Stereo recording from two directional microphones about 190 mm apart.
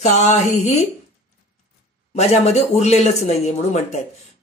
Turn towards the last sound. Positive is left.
turn(degrees=35)  # may be behind; listen again after turning